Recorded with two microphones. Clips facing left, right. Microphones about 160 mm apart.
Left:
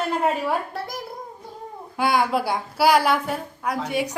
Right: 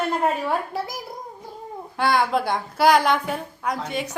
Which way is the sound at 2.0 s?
10° left (ahead or behind).